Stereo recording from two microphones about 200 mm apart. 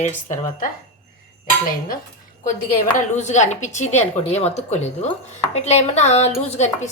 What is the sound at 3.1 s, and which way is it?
A woman's voice, 35° left (ahead or behind).